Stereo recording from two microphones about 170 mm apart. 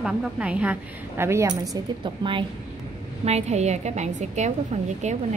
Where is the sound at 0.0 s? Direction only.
5° right (ahead or behind); by 2.4 s 30° right (ahead or behind).